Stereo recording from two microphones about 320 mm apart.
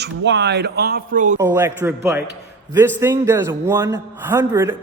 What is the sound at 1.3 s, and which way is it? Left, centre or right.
A man's voice, centre.